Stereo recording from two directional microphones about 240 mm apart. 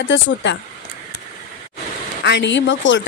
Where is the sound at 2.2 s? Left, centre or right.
Left.